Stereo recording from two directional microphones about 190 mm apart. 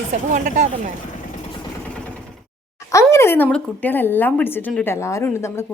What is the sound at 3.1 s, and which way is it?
A woman's voice, 15° left (ahead or behind).